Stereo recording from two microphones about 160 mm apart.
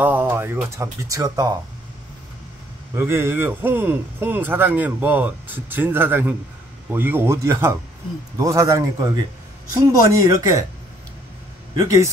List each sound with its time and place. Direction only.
0.0 s a man's voice: 10° right (ahead or behind)
3.0 s a man's voice: 15° right (ahead or behind)
11.8 s a man's voice: 20° right (ahead or behind)